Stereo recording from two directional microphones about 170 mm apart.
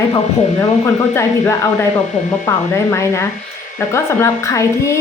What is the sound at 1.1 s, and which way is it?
Speech, 15° left (ahead or behind).